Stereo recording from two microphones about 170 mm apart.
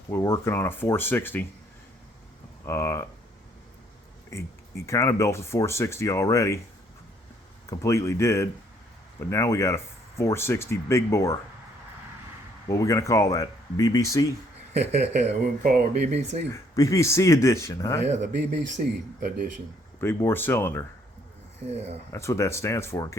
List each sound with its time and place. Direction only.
0.1 s speech: 15° left (ahead or behind)
2.6 s speech: 15° left (ahead or behind)
4.3 s speech: 15° left (ahead or behind)
7.7 s speech: 15° left (ahead or behind)
12.6 s speech: 20° left (ahead or behind)
14.7 s speech: 40° right (ahead or behind)
15.6 s speech: 60° right (ahead or behind)
16.5 s speech: 20° left (ahead or behind)
18.8 s speech: 60° right (ahead or behind)
20.0 s speech: 15° left (ahead or behind)
21.7 s speech: 40° right (ahead or behind)
22.1 s speech: 15° left (ahead or behind)